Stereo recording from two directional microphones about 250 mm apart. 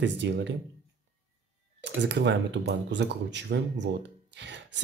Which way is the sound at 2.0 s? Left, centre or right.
Right.